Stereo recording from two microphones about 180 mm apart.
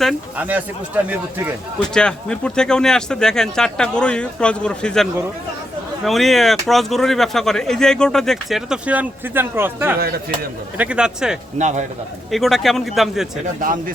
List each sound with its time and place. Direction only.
0.0 s speech: centre (ahead or behind)
0.4 s a man's voice: 10° right (ahead or behind)
1.8 s speech: 5° left (ahead or behind)
6.1 s speech: centre (ahead or behind)
10.0 s a man's voice: 60° right (ahead or behind)
10.8 s speech: 5° right (ahead or behind)
11.5 s a man's voice: 40° right (ahead or behind)
12.3 s speech: centre (ahead or behind)
13.4 s speech: 50° right (ahead or behind)